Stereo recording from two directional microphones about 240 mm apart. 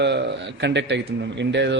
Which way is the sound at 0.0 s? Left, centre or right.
Right.